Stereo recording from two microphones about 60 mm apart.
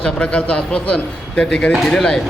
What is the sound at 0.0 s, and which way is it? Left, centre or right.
A man's voice, centre.